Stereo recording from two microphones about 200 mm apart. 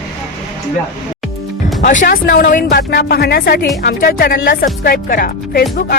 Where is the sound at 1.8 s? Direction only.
40° left (ahead or behind).